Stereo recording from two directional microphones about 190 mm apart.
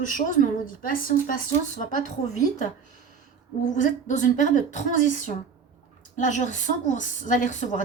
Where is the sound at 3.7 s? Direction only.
40° left (ahead or behind).